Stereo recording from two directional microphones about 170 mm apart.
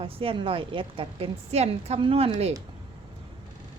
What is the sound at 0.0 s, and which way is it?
A woman's voice, 35° right (ahead or behind).